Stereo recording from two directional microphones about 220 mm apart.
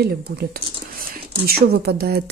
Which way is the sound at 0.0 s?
45° right (ahead or behind).